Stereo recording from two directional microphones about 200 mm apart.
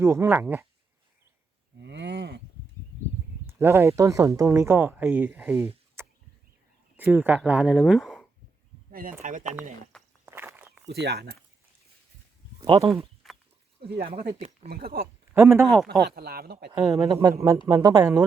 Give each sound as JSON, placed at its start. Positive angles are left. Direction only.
{"t": 0.0, "sound": "speech", "side_deg": -15}
{"t": 1.8, "sound": "cattle", "side_deg": -60}
{"t": 3.4, "sound": "speech", "side_deg": -10}
{"t": 8.9, "sound": "speech", "side_deg": -45}
{"t": 10.2, "sound": "walk", "side_deg": -10}
{"t": 10.8, "sound": "speech", "side_deg": -55}
{"t": 12.5, "sound": "a sound", "side_deg": -25}
{"t": 13.2, "sound": "goat", "side_deg": 0}
{"t": 14.0, "sound": "speech", "side_deg": -30}
{"t": 14.7, "sound": "speech", "side_deg": -50}
{"t": 15.3, "sound": "speech", "side_deg": -10}
{"t": 15.7, "sound": "speech", "side_deg": 0}
{"t": 16.0, "sound": "speech", "side_deg": -50}
{"t": 17.1, "sound": "speech", "side_deg": -20}